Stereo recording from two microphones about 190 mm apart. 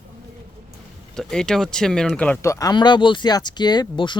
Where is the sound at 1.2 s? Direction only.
5° left (ahead or behind).